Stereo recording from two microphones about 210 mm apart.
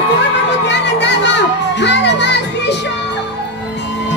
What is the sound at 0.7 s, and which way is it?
Music, 55° left (ahead or behind).